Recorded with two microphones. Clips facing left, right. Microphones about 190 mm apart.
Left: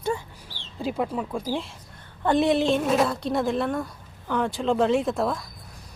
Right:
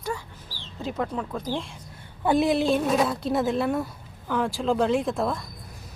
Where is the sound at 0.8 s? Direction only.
10° left (ahead or behind).